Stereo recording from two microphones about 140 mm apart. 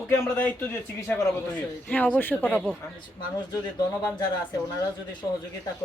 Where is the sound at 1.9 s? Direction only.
10° left (ahead or behind).